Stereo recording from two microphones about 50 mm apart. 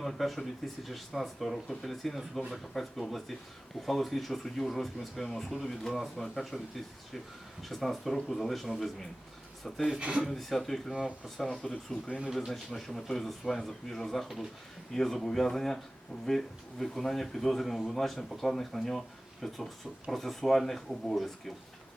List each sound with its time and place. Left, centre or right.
0.0 s speech: centre
10.0 s speech: centre
10.2 s speech: centre
12.0 s speech: centre
12.5 s speech: centre